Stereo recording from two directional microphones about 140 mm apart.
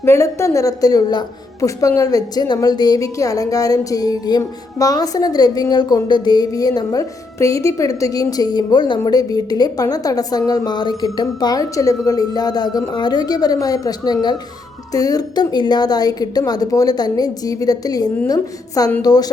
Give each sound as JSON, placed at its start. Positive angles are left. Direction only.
{"t": 0.0, "sound": "speech", "side_deg": 20}